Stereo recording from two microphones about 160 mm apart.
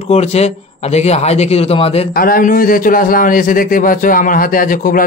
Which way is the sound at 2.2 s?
60° left (ahead or behind).